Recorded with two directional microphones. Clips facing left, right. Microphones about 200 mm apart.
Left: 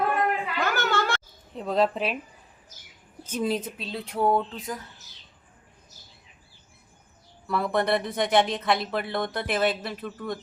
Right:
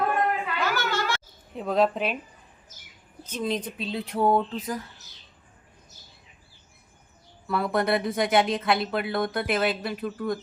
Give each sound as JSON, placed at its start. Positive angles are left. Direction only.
{"t": 0.6, "sound": "a sound", "side_deg": 55}
{"t": 1.5, "sound": "speech", "side_deg": 0}
{"t": 3.2, "sound": "speech", "side_deg": 10}
{"t": 7.4, "sound": "speech", "side_deg": 0}